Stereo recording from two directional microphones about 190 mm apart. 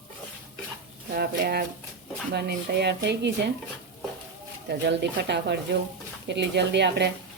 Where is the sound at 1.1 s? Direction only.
55° right (ahead or behind).